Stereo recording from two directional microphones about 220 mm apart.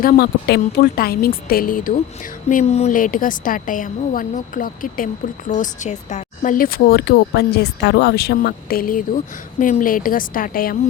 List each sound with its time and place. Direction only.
0.0 s speech: 45° left (ahead or behind)